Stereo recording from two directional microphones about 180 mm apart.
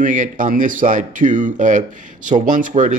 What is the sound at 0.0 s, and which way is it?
Speech, 45° right (ahead or behind).